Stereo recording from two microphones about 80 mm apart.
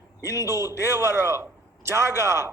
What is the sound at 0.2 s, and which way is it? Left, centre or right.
A man's voice, right.